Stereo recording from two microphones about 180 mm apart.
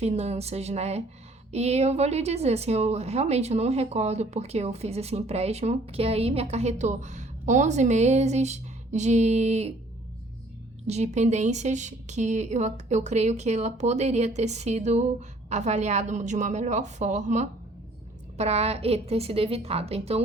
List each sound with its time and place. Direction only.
0.0 s a woman's voice: 35° right (ahead or behind)
10.8 s a woman's voice: 40° right (ahead or behind)